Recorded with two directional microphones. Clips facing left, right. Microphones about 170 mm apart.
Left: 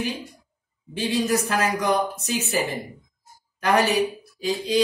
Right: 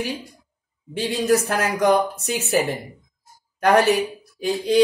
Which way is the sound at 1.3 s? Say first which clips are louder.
Right 3 dB; 60° right (ahead or behind).